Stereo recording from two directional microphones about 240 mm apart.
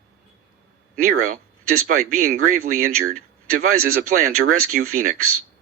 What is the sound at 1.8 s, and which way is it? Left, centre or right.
Speech, right.